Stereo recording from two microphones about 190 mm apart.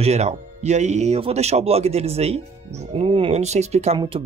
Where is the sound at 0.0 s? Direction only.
35° right (ahead or behind).